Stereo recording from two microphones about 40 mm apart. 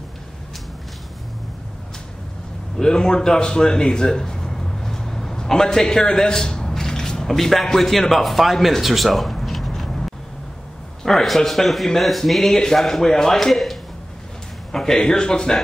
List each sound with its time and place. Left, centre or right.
2.8 s a man's voice: centre
11.1 s speech: centre